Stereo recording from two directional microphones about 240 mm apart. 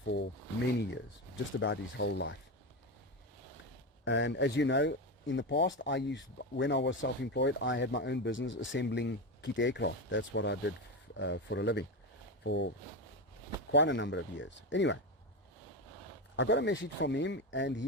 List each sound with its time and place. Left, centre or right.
0.0 s speech: left
1.5 s speech: left
4.0 s speech: left
16.3 s speech: left